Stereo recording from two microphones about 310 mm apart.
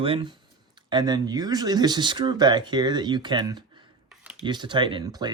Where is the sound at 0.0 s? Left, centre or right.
Centre.